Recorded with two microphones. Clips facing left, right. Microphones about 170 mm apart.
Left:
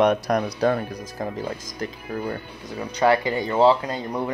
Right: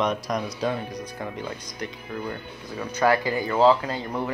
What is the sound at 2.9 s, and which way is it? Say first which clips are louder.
Speech: left 2 dB; 20° left (ahead or behind).